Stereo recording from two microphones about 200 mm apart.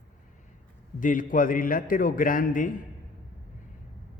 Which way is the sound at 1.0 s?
40° left (ahead or behind).